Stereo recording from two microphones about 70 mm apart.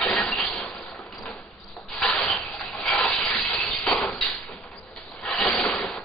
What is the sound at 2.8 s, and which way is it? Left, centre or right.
Hiss, centre.